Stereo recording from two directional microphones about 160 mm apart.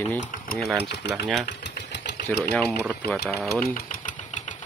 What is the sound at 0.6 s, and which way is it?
Speech, centre (ahead or behind).